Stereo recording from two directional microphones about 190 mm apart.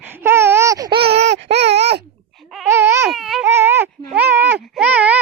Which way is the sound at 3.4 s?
10° right (ahead or behind).